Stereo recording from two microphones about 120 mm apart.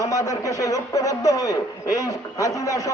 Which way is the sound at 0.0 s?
25° left (ahead or behind).